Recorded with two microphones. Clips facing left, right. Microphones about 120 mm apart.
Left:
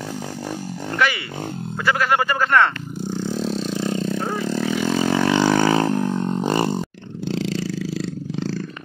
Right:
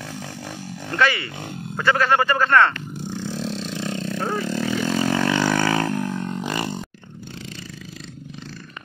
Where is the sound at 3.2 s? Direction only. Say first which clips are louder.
Left 5 dB; 5° left (ahead or behind).